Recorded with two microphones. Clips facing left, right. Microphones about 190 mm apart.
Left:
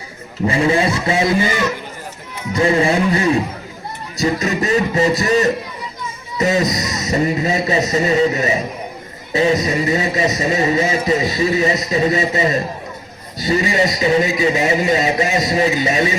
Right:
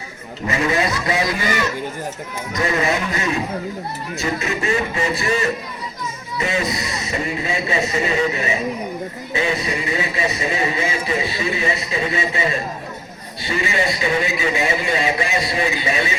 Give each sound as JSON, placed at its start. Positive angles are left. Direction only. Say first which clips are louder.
{"t": 0.4, "sound": "music", "louder": "left 4 dB", "side_deg": 30}
{"t": 2.5, "sound": "music", "louder": "left 5 dB", "side_deg": 30}
{"t": 4.2, "sound": "speech", "louder": "left 6 dB", "side_deg": 35}